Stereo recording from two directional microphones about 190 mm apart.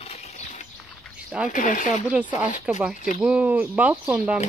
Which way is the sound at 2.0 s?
10° right (ahead or behind).